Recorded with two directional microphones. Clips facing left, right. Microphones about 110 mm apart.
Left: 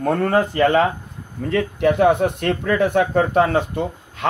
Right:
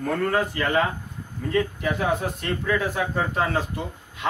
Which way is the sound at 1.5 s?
70° left (ahead or behind).